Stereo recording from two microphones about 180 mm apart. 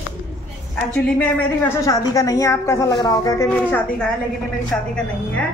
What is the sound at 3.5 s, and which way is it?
A man's voice, 5° left (ahead or behind).